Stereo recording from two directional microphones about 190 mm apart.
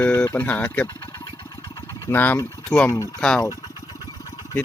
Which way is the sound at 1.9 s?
10° left (ahead or behind).